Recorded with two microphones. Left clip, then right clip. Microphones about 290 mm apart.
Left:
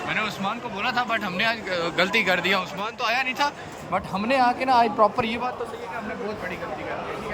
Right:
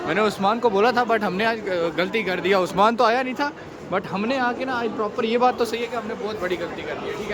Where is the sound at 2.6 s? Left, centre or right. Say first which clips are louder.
Right 10 dB; right; by 5.4 s centre.